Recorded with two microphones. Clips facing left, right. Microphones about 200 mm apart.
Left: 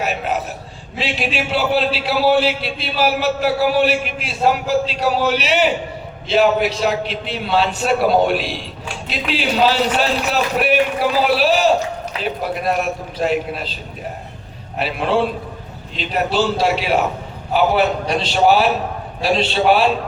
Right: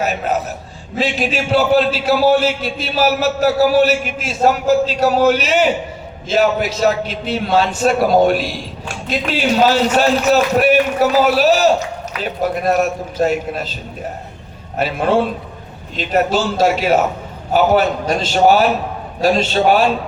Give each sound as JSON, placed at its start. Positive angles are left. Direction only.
{"t": 0.0, "sound": "a sound", "side_deg": -45}
{"t": 0.9, "sound": "a man's voice", "side_deg": -45}
{"t": 14.8, "sound": "a man's voice", "side_deg": -45}